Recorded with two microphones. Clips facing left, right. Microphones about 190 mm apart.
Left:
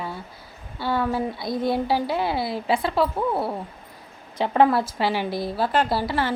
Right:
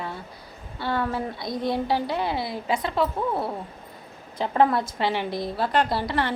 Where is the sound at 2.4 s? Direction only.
30° left (ahead or behind).